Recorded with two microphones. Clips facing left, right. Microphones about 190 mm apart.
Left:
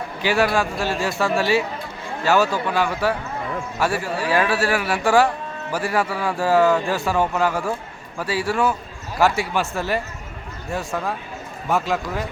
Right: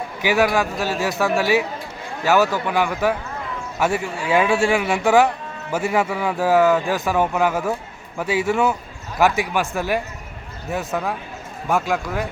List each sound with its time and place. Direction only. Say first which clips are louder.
0.2 s speech: right 1 dB; 15° right (ahead or behind)
10.7 s speech: right 2 dB; 5° right (ahead or behind)